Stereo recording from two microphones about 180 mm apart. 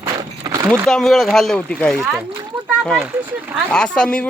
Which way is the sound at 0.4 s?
20° right (ahead or behind).